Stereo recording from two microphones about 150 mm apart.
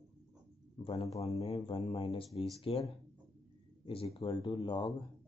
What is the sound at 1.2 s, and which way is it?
Speech, 40° left (ahead or behind).